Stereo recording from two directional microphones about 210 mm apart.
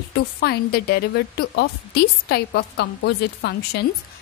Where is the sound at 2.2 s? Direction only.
50° left (ahead or behind).